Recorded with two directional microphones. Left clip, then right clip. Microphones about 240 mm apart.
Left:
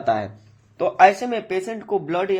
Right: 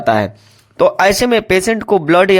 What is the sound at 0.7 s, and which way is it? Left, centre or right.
Speech, right.